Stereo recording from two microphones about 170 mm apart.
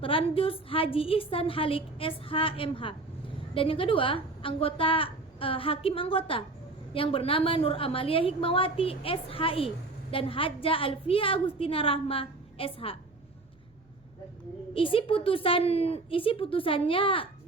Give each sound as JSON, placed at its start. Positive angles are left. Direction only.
{"t": 0.0, "sound": "a woman's voice", "side_deg": 30}
{"t": 14.7, "sound": "a woman's voice", "side_deg": 30}